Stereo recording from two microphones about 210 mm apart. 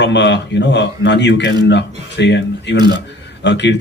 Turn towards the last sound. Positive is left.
turn(degrees=55)  # may be behind; listen again after turning